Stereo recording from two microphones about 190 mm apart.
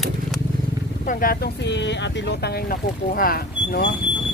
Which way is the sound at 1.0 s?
50° left (ahead or behind).